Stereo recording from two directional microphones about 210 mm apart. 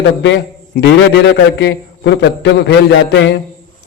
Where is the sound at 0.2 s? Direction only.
55° left (ahead or behind).